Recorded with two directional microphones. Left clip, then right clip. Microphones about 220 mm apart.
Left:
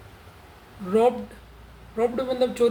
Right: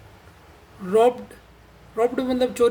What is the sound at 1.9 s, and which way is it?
Speech, 50° right (ahead or behind).